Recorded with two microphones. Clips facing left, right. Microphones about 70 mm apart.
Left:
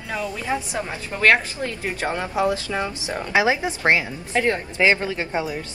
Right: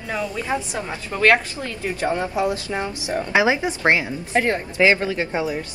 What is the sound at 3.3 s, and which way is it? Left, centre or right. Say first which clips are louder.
Speech: right 1 dB; right.